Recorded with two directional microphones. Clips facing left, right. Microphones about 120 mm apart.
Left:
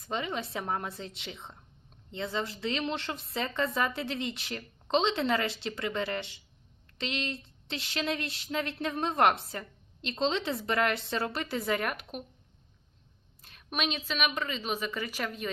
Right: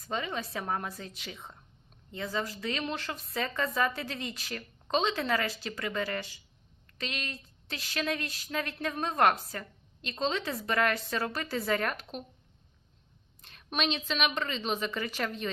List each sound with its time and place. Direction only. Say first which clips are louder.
0.0 s a woman's voice: left 1 dB; 20° left (ahead or behind)
13.4 s a woman's voice: right 1 dB; 5° left (ahead or behind)